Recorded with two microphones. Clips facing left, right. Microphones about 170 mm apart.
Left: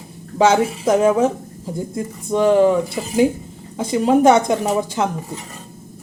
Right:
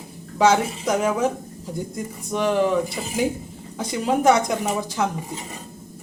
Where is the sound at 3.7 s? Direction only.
25° left (ahead or behind).